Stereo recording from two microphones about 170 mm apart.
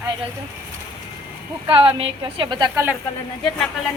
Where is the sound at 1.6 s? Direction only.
35° right (ahead or behind).